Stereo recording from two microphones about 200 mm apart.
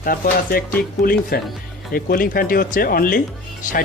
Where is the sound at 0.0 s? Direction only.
45° left (ahead or behind).